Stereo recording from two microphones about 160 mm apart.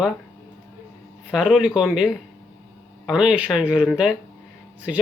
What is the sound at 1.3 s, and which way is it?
Speech, 5° right (ahead or behind).